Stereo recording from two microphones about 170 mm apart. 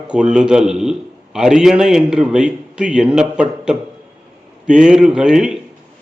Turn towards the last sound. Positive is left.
turn(degrees=-5)  # may be behind; listen again after turning